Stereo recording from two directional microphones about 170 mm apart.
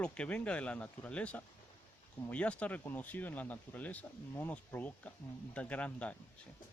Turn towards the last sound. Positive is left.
turn(degrees=10)  # may be behind; listen again after turning